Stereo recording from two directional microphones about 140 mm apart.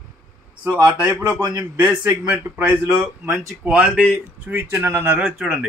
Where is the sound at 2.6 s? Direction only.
5° right (ahead or behind).